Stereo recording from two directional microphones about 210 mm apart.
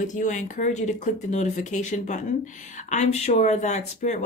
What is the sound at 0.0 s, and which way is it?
Speech, 35° left (ahead or behind).